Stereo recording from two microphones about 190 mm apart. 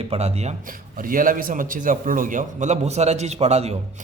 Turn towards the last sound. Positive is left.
turn(degrees=-35)  # may be behind; listen again after turning